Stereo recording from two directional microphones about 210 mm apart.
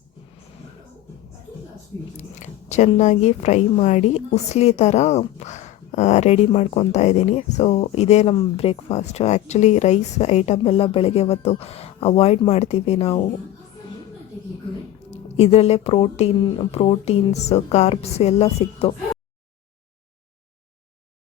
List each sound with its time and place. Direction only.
2.3 s speech: 35° left (ahead or behind)
15.1 s speech: 30° left (ahead or behind)